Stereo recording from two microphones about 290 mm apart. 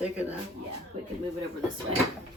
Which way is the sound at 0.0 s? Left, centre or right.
Centre.